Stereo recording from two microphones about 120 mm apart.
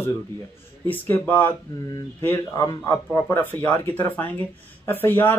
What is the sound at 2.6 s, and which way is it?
Speech, 30° left (ahead or behind).